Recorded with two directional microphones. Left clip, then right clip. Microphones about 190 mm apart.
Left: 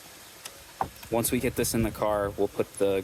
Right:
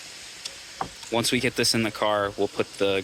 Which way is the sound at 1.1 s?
10° left (ahead or behind).